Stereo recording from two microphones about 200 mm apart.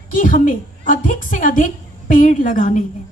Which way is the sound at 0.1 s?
40° left (ahead or behind).